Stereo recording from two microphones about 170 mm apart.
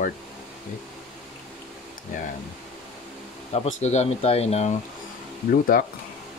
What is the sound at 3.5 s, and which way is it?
Speech, 40° left (ahead or behind).